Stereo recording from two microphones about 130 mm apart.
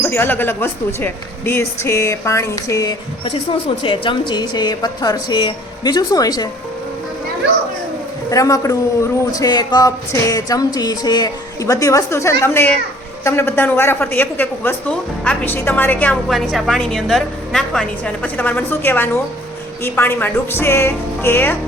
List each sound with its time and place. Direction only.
0.0 s a woman's voice: 15° left (ahead or behind)
3.8 s a woman's voice: 40° left (ahead or behind)
8.3 s a woman's voice: 25° left (ahead or behind)
16.3 s a woman's voice: centre (ahead or behind); by 21.5 s 15° left (ahead or behind)